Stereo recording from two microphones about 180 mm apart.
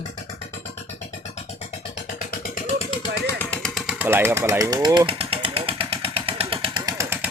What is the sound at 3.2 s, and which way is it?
Jackhammer, 15° left (ahead or behind).